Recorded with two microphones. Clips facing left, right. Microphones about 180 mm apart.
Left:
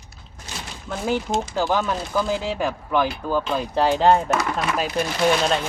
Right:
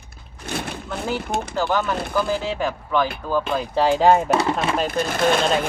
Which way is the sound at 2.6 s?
10° left (ahead or behind).